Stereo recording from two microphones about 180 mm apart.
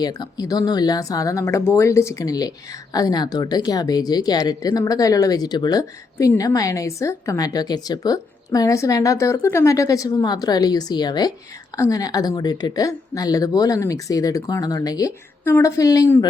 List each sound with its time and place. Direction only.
0.0 s speech: 20° left (ahead or behind)